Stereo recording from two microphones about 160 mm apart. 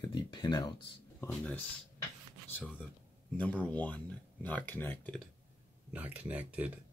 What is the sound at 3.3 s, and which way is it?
Speech, 10° left (ahead or behind).